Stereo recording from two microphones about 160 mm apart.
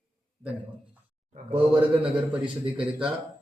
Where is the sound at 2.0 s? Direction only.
10° right (ahead or behind).